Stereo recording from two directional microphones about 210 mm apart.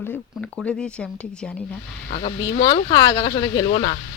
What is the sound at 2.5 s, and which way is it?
A woman's voice, 20° left (ahead or behind).